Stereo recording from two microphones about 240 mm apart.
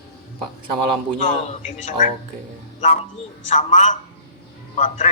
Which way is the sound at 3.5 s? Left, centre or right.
Left.